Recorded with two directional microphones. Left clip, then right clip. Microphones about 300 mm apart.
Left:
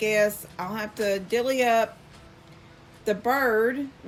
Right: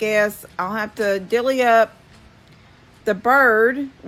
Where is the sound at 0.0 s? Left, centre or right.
Centre.